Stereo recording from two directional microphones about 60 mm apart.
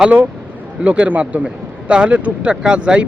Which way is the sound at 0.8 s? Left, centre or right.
Right.